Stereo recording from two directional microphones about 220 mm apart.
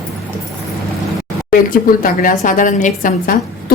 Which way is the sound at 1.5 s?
40° left (ahead or behind).